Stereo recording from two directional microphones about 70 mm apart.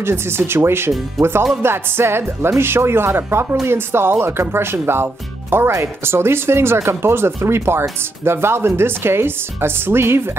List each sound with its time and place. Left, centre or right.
0.0 s speech: right